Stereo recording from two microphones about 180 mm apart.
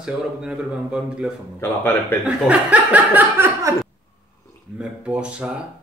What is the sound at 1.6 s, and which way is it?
Speech, 10° left (ahead or behind).